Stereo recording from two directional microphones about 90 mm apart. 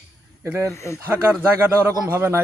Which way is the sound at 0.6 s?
35° left (ahead or behind).